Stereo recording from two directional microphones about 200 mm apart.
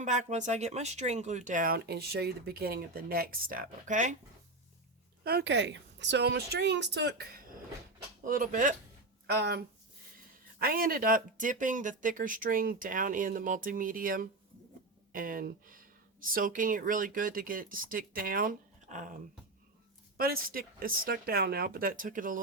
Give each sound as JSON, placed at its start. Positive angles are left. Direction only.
{"t": 0.0, "sound": "speech", "side_deg": -35}
{"t": 5.2, "sound": "a woman's voice", "side_deg": -55}
{"t": 8.2, "sound": "speech", "side_deg": -40}
{"t": 9.2, "sound": "speech", "side_deg": -55}